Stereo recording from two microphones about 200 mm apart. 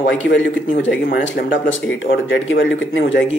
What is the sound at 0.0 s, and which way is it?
Speech, 60° left (ahead or behind).